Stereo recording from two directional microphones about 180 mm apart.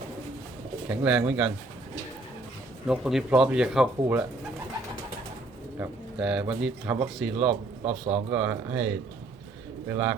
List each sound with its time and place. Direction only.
0.9 s speech: 5° right (ahead or behind)
2.8 s speech: 5° right (ahead or behind)
5.8 s speech: 5° right (ahead or behind)
7.9 s speech: 35° right (ahead or behind)
8.3 s speech: 10° right (ahead or behind)
9.9 s speech: 5° right (ahead or behind)